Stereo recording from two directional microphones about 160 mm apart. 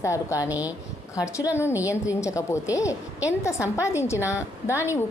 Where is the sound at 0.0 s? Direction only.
20° left (ahead or behind).